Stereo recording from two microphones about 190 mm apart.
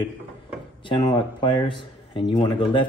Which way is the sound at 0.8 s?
25° left (ahead or behind).